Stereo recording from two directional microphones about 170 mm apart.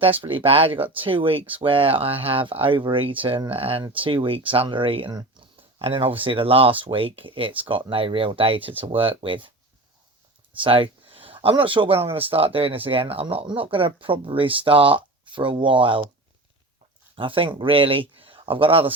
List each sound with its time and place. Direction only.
0.0 s speech: 30° right (ahead or behind)
10.6 s speech: 30° right (ahead or behind)
17.2 s speech: 30° right (ahead or behind)